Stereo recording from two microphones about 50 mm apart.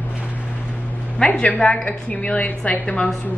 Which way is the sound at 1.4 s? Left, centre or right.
Left.